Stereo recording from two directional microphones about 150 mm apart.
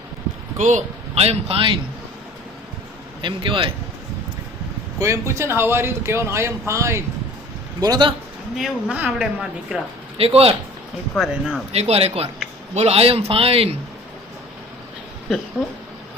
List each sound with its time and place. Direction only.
0.5 s a man's voice: 55° right (ahead or behind)
3.2 s a man's voice: 35° right (ahead or behind)
4.9 s a man's voice: 20° right (ahead or behind)
8.5 s speech: 5° right (ahead or behind)
10.2 s a man's voice: 40° right (ahead or behind)
11.2 s speech: 5° right (ahead or behind)
11.7 s a man's voice: 45° right (ahead or behind)